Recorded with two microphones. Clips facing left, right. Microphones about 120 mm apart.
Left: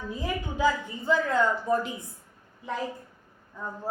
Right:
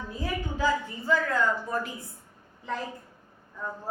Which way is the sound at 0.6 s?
20° left (ahead or behind).